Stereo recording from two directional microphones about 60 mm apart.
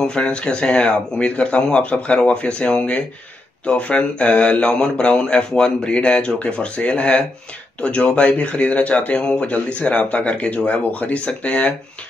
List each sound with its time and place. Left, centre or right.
0.0 s speech: centre